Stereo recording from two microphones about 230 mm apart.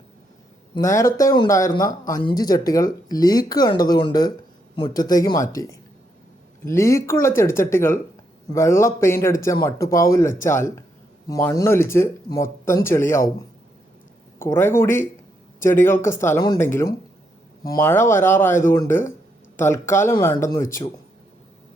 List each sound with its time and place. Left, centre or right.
0.7 s speech: centre
14.3 s speech: centre